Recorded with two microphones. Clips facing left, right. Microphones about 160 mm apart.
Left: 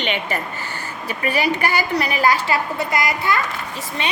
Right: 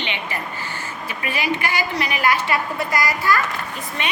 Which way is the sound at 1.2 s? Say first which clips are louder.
Left 4 dB; 35° left (ahead or behind).